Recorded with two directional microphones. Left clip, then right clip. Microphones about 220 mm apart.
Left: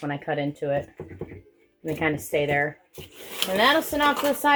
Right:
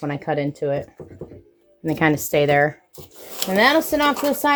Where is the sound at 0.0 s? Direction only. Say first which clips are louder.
Right 4 dB; 50° right (ahead or behind).